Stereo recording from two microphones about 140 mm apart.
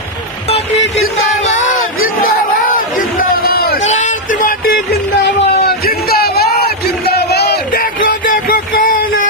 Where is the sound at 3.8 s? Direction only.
55° left (ahead or behind); by 4.8 s 85° left.